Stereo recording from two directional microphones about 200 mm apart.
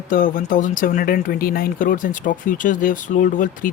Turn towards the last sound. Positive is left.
turn(degrees=40)  # may be behind; listen again after turning